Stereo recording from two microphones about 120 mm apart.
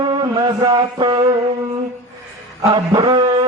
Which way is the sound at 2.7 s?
35° right (ahead or behind).